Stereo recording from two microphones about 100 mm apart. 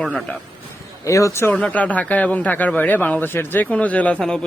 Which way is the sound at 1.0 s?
35° left (ahead or behind).